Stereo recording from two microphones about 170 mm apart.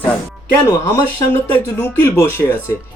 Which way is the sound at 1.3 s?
10° left (ahead or behind).